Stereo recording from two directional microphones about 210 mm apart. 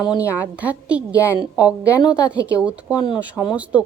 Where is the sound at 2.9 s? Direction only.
20° left (ahead or behind).